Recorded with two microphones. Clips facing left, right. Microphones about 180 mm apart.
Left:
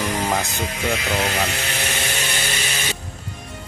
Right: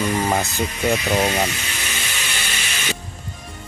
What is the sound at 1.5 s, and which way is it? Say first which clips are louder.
Vehicle: left 4 dB; 60° left (ahead or behind).